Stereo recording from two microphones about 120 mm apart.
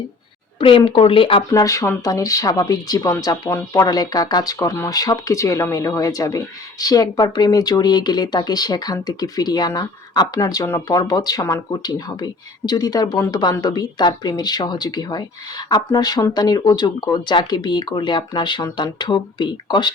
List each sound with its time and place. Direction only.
0.6 s speech: 45° left (ahead or behind)
1.5 s speech: 25° left (ahead or behind)